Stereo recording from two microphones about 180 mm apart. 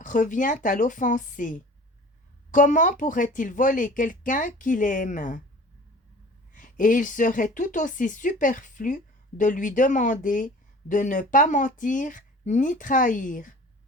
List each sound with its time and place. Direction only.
0.0 s speech: 45° left (ahead or behind)
6.5 s speech: 45° left (ahead or behind)